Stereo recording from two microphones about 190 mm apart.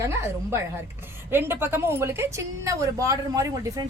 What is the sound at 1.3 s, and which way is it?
A woman's voice, 10° right (ahead or behind).